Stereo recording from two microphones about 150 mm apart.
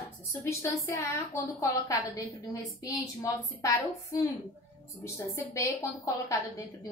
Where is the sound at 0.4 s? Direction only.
20° left (ahead or behind).